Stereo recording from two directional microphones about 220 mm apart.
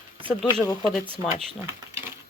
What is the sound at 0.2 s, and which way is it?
Speech, 25° right (ahead or behind).